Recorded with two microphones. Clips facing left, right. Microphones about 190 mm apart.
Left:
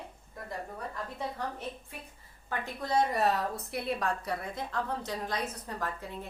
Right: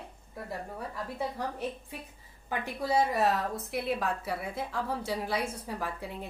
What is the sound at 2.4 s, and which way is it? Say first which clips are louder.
A woman's voice: right 3 dB; 10° right (ahead or behind).